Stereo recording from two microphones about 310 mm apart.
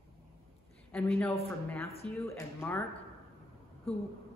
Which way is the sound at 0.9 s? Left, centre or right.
Centre.